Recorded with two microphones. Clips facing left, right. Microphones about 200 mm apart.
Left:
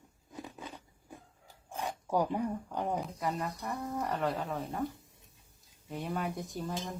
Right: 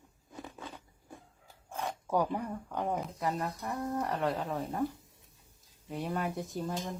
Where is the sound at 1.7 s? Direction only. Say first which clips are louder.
Even; 15° left (ahead or behind).